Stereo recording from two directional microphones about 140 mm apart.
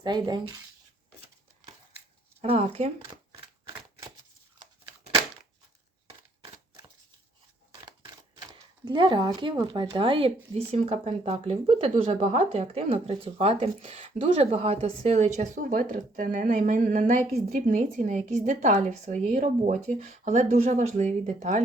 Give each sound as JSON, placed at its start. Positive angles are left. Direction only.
{"t": 0.0, "sound": "speech", "side_deg": -30}
{"t": 2.4, "sound": "speech", "side_deg": -45}
{"t": 6.4, "sound": "a sound", "side_deg": -35}
{"t": 8.4, "sound": "speech", "side_deg": -35}